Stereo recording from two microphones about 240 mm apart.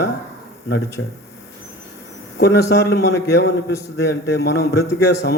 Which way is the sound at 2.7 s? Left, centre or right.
Left.